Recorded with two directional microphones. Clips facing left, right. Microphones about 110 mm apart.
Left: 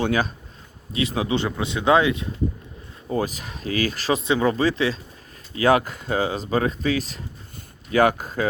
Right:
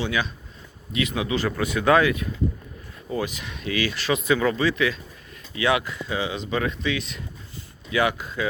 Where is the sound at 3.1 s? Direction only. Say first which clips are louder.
Left 3 dB; 40° left (ahead or behind).